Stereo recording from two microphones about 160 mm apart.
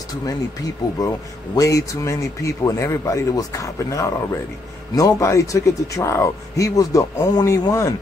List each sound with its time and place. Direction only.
1.5 s speech: 20° left (ahead or behind)